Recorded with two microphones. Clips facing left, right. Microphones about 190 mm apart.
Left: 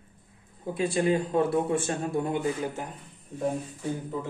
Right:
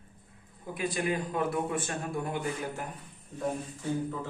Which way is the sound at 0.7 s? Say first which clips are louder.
Left 6 dB; 30° left (ahead or behind).